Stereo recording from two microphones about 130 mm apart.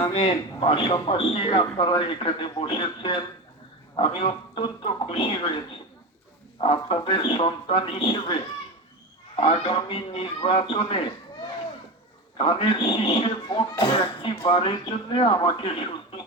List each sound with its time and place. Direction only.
0.1 s a man's voice: 40° left (ahead or behind)
12.4 s speech: 45° left (ahead or behind)